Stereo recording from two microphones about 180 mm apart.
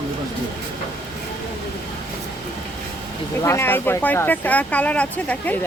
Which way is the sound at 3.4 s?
15° left (ahead or behind).